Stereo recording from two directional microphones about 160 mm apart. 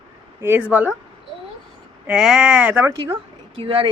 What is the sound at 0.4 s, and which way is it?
Speech, 10° right (ahead or behind).